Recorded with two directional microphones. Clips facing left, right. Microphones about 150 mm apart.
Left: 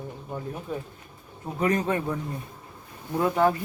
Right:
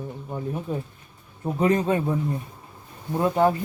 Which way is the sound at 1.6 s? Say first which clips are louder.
Right 3 dB; 25° right (ahead or behind).